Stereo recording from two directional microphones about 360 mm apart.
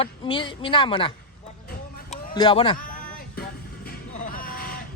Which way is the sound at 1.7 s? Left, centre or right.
Left.